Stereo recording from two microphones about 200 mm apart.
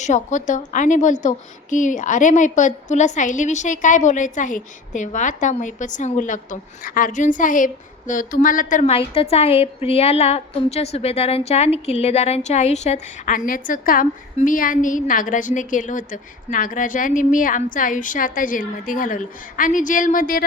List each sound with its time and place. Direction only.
0.0 s a woman's voice: 35° left (ahead or behind)